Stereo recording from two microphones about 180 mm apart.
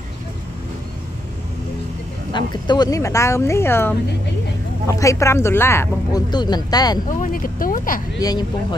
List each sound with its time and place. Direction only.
2.3 s speech: 25° left (ahead or behind)
7.1 s speech: 50° left (ahead or behind)
8.2 s speech: 20° left (ahead or behind)